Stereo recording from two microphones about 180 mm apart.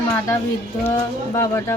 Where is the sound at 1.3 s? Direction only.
20° left (ahead or behind).